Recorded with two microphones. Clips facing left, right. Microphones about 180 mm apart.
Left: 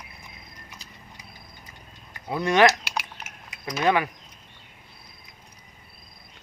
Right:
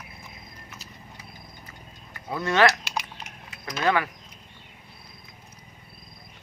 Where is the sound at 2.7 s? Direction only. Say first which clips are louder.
Left 1 dB; centre (ahead or behind).